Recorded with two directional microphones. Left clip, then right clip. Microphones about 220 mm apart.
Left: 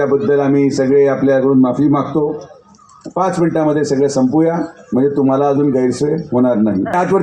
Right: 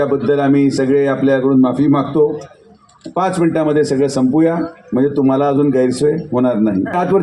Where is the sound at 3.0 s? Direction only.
40° left (ahead or behind).